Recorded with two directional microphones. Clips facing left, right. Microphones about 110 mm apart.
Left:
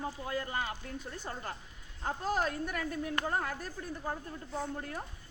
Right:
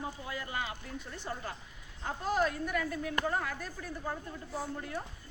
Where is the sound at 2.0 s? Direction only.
40° left (ahead or behind).